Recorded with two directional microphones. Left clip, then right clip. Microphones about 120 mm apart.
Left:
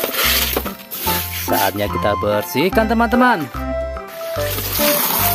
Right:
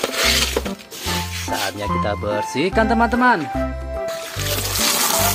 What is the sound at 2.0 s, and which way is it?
Speech, 70° left (ahead or behind).